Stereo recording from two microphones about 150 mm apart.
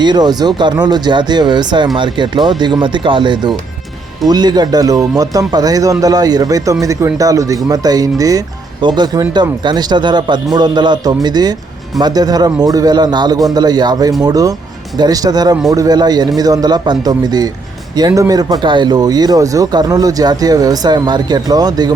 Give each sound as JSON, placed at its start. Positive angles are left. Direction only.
{"t": 0.0, "sound": "speech", "side_deg": -30}